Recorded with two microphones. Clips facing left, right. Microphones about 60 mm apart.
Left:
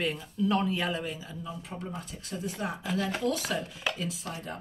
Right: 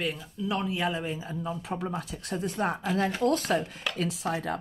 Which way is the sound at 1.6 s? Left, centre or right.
Right.